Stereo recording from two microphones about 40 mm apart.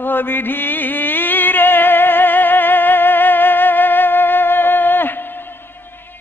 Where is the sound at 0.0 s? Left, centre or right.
Left.